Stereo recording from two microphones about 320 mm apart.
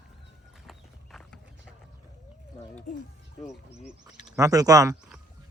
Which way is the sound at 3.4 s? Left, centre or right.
Centre.